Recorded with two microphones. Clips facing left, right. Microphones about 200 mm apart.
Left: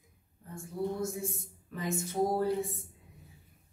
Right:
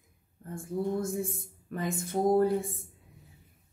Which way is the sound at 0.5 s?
55° right (ahead or behind).